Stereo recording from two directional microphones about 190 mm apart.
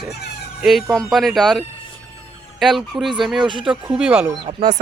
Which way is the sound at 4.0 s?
5° right (ahead or behind).